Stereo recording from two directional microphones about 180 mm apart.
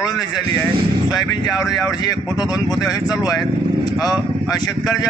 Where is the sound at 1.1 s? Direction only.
20° left (ahead or behind).